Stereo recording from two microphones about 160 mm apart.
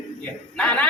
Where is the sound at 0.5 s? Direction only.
10° left (ahead or behind).